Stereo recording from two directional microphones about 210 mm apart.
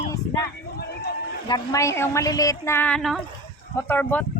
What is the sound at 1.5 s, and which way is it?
A woman's voice, 15° left (ahead or behind).